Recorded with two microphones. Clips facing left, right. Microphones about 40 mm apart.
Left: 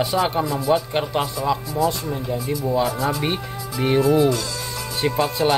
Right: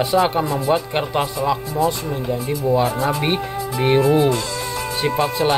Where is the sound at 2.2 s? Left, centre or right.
Right.